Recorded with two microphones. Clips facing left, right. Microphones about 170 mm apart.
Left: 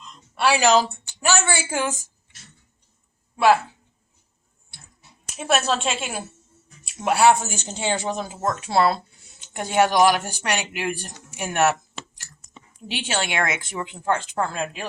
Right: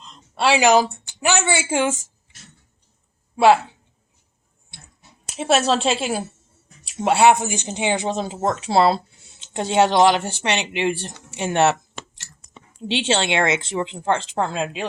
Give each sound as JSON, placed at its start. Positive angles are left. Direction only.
{"t": 0.0, "sound": "a sound", "side_deg": -30}
{"t": 1.2, "sound": "speech", "side_deg": -20}
{"t": 3.3, "sound": "speech", "side_deg": -25}
{"t": 5.4, "sound": "a woman's voice", "side_deg": -30}
{"t": 12.9, "sound": "speech", "side_deg": -25}